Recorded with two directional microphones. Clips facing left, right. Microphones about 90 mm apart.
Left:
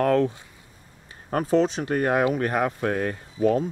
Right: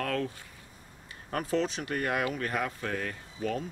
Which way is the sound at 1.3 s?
30° left (ahead or behind).